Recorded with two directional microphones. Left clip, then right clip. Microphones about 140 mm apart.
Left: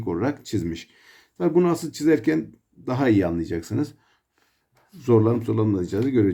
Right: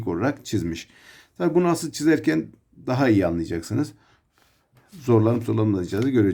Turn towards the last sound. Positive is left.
turn(degrees=-35)  # may be behind; listen again after turning